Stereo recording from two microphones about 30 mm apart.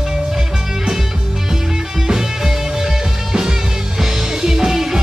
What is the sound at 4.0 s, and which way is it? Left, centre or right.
Music, centre.